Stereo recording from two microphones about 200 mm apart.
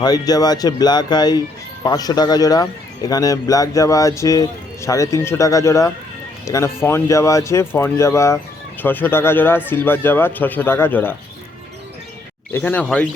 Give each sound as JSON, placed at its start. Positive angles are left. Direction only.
{"t": 0.0, "sound": "a man's voice", "side_deg": 20}
{"t": 12.5, "sound": "a man's voice", "side_deg": 10}